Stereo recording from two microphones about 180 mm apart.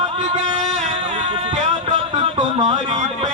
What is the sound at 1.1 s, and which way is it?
Music, 40° right (ahead or behind).